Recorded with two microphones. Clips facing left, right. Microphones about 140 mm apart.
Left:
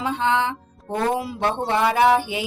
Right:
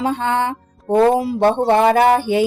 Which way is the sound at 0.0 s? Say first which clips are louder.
Right 3 dB; 50° right (ahead or behind).